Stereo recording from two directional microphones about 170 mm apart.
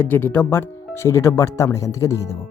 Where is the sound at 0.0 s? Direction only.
10° left (ahead or behind).